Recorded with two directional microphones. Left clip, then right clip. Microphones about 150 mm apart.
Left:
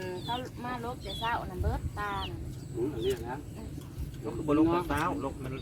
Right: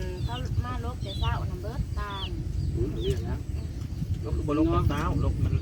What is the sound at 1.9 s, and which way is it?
Speech, 20° left (ahead or behind).